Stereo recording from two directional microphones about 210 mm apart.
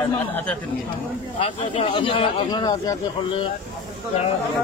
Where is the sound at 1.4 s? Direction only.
25° left (ahead or behind).